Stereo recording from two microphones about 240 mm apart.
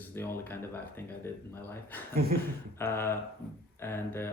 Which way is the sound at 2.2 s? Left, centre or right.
Right.